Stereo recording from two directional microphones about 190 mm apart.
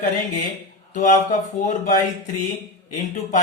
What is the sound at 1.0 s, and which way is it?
Speech, 40° left (ahead or behind).